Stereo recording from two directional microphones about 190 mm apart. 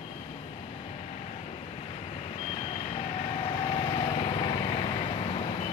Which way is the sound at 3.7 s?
25° left (ahead or behind).